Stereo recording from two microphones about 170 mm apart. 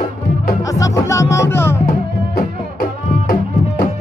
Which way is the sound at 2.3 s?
60° left (ahead or behind).